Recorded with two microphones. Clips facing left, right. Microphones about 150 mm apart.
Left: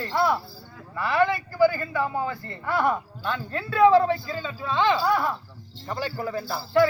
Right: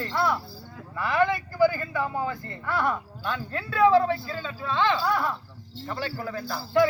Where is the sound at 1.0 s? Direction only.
15° right (ahead or behind).